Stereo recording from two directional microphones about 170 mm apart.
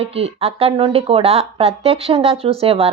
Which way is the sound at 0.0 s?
35° right (ahead or behind).